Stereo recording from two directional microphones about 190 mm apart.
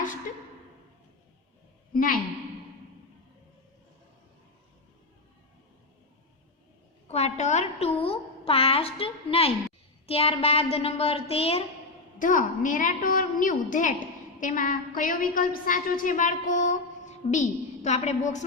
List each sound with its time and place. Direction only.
1.9 s a woman's voice: 50° left (ahead or behind)
7.1 s a woman's voice: 35° left (ahead or behind)
12.2 s a woman's voice: 45° left (ahead or behind)